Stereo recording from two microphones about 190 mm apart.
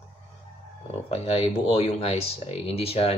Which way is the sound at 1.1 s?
30° left (ahead or behind).